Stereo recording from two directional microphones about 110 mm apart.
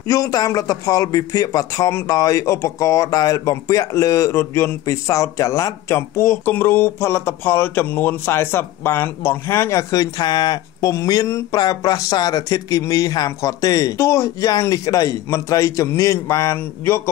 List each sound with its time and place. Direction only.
0.1 s speech: 35° left (ahead or behind)